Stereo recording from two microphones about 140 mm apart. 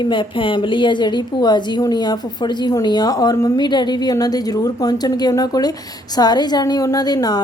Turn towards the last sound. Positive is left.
turn(degrees=30)  # may be behind; listen again after turning